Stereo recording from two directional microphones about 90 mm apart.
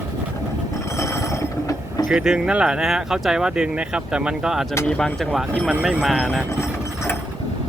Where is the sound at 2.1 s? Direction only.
5° right (ahead or behind).